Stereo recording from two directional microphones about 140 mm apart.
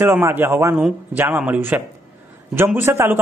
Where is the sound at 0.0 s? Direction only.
15° right (ahead or behind).